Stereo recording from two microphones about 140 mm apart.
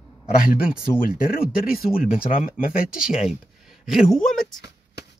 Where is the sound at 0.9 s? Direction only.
90° left.